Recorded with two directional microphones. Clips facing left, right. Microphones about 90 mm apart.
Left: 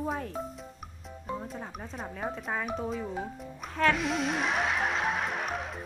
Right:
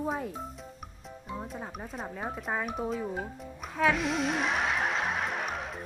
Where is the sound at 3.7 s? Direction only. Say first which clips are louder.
Even; centre (ahead or behind).